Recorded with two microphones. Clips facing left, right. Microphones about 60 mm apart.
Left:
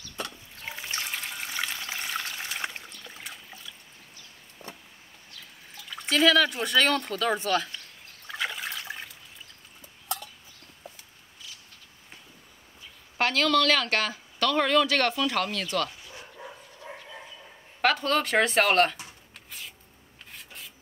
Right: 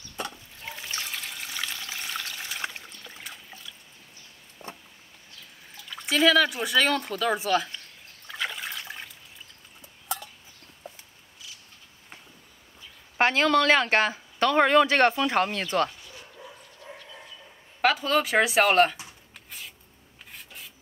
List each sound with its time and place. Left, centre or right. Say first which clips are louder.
0.7 s trickle: left 1 dB; centre
2.2 s water: even; centre
3.0 s trickle: even; centre
4.6 s vehicle: right 2 dB; centre
5.9 s speech: even; centre
8.3 s water: even; centre
10.0 s a sound: right 1 dB; centre
13.2 s speech: right 2 dB; right
16.2 s bow-wow: left 2 dB; left
17.8 s speech: right 1 dB; centre